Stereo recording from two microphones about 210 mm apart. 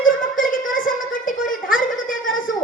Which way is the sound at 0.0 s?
40° left (ahead or behind).